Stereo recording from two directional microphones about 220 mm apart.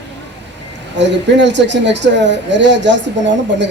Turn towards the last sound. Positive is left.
turn(degrees=-55)  # may be behind; listen again after turning